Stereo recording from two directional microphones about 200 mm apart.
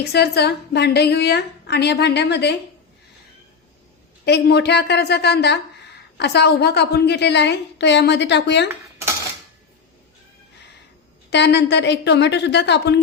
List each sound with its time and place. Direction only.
0.1 s speech: 55° left (ahead or behind)
4.3 s speech: 55° left (ahead or behind)
11.3 s speech: 60° left (ahead or behind)